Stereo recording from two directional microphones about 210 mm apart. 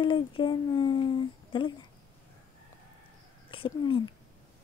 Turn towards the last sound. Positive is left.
turn(degrees=25)  # may be behind; listen again after turning